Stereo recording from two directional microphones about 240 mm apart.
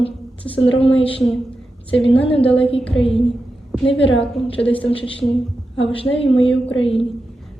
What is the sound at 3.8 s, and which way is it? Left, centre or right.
A woman's voice, left.